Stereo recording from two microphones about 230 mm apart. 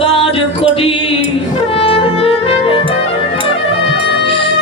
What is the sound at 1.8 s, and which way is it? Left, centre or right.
Music, left.